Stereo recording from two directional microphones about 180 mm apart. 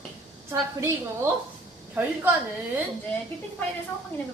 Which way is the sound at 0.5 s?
15° right (ahead or behind).